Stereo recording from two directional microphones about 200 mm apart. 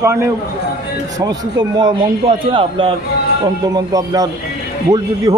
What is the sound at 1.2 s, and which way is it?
A man's voice, 20° right (ahead or behind).